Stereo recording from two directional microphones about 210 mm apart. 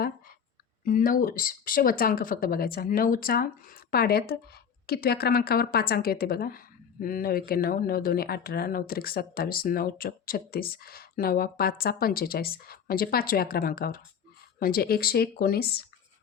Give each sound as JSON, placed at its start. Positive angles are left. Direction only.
{"t": 0.9, "sound": "speech", "side_deg": 40}